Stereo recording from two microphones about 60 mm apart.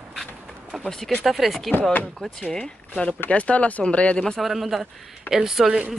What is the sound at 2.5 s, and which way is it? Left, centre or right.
Speech, centre.